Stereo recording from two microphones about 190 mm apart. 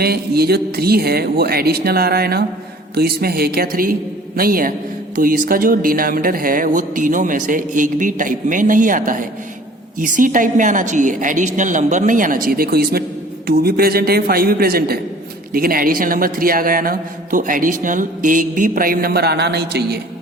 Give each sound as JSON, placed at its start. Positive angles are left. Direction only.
{"t": 0.0, "sound": "a man's voice", "side_deg": -55}